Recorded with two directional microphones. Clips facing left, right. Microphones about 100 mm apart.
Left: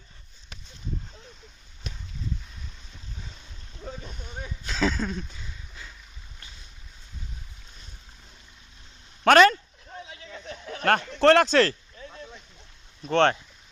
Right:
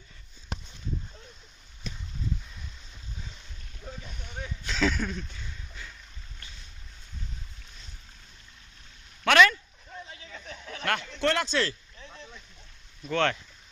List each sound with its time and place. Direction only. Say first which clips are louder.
4.2 s a sound: left 1 dB; 20° left (ahead or behind)
9.2 s speech: left 4 dB; 40° left (ahead or behind)
10.7 s speech: left 7 dB; 40° left (ahead or behind); by 11.8 s 55° left (ahead or behind)
13.1 s speech: left 6 dB; 30° left (ahead or behind)